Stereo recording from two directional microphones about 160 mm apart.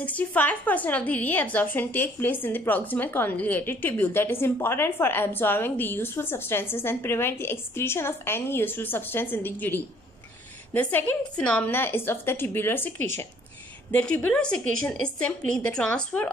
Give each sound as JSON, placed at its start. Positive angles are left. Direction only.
{"t": 0.0, "sound": "a woman's voice", "side_deg": 10}
{"t": 13.9, "sound": "a woman's voice", "side_deg": 10}